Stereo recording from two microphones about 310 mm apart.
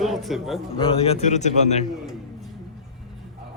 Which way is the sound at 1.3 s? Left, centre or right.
Left.